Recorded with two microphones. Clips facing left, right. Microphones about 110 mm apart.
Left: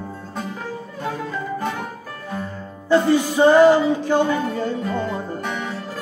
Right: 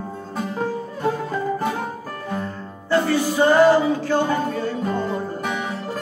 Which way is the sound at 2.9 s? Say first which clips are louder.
Left 3 dB; 20° left (ahead or behind).